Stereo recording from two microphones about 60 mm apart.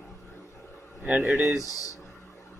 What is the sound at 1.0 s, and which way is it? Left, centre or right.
Speech, right.